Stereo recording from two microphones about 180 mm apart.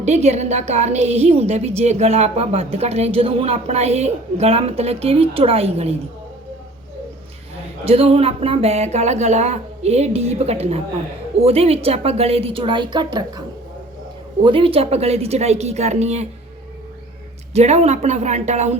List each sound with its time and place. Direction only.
0.0 s a woman's voice: 40° right (ahead or behind)
7.9 s a woman's voice: 35° right (ahead or behind)
14.4 s a woman's voice: 30° right (ahead or behind)
17.5 s a woman's voice: 35° right (ahead or behind)